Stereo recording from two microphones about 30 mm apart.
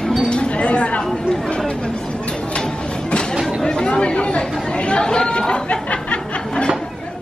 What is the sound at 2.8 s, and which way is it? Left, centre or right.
Train, left.